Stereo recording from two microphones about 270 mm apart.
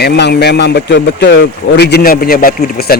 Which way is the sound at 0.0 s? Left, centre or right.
Left.